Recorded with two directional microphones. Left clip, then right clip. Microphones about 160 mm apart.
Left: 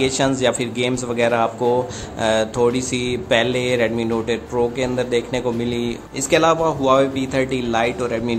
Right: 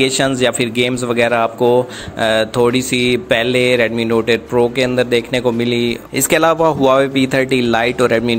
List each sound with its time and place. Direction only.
0.4 s mantra: 20° right (ahead or behind)
6.1 s a man's voice: 40° right (ahead or behind)